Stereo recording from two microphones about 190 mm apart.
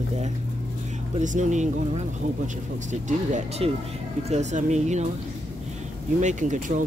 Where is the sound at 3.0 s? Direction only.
40° right (ahead or behind).